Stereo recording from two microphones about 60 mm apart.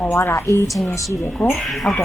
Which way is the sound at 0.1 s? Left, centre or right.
Left.